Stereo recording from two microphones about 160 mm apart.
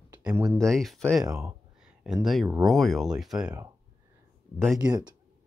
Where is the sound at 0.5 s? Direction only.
Centre (ahead or behind).